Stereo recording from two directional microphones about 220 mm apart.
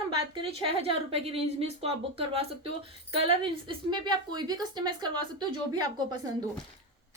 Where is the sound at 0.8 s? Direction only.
25° right (ahead or behind).